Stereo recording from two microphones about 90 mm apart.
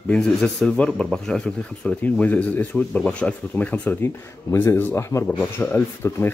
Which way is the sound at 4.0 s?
30° left (ahead or behind).